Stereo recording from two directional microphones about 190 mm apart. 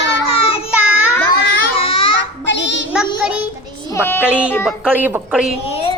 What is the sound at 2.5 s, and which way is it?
Child singing, 70° left (ahead or behind).